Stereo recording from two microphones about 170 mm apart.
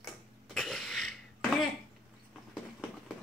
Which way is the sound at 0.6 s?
Centre (ahead or behind).